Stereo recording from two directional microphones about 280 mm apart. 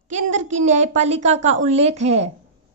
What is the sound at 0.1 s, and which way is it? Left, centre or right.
A woman's voice, right.